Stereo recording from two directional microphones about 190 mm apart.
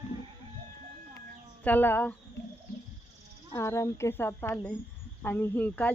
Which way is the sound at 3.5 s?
15° left (ahead or behind).